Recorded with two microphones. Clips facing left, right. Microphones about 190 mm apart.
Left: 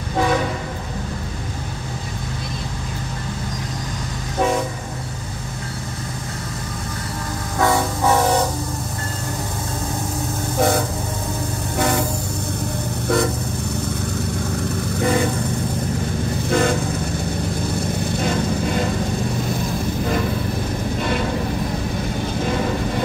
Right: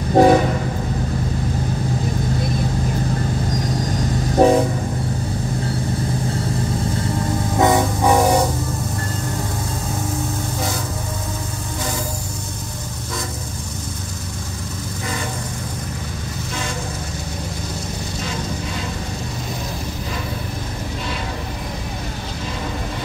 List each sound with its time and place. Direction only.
0.2 s train: 40° right (ahead or behind)
4.4 s train: 35° right (ahead or behind)
7.5 s train: 20° right (ahead or behind)